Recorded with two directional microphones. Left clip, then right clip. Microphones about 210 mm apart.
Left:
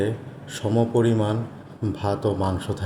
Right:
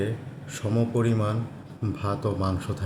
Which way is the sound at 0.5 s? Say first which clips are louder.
Left 5 dB; centre (ahead or behind).